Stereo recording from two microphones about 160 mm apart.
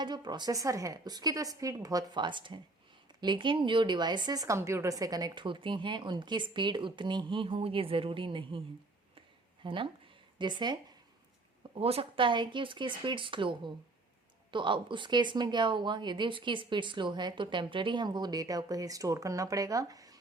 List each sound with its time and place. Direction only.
0.0 s speech: 25° right (ahead or behind)
9.6 s speech: 30° right (ahead or behind)
11.7 s speech: 40° right (ahead or behind); by 20.1 s 20° right (ahead or behind)